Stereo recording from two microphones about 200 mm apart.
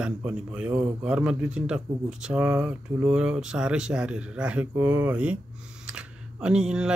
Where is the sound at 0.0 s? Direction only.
5° right (ahead or behind).